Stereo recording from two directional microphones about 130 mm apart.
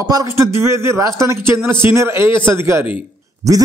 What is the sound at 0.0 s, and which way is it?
A man's voice, 25° right (ahead or behind).